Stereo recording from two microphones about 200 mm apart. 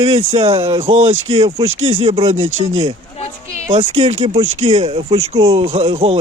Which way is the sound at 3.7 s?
30° right (ahead or behind).